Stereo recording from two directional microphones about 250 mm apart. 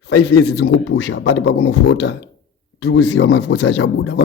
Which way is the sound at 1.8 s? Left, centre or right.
Left.